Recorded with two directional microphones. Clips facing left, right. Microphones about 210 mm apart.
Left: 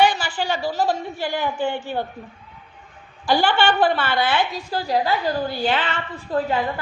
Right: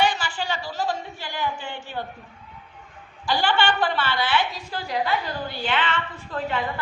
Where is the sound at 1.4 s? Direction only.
55° left (ahead or behind).